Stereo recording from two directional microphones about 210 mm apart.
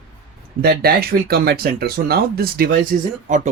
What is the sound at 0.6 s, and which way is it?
Speech, 45° right (ahead or behind).